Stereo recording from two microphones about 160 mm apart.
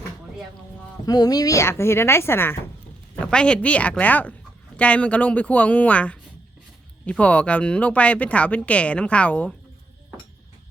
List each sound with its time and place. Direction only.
1.0 s speech: 25° left (ahead or behind)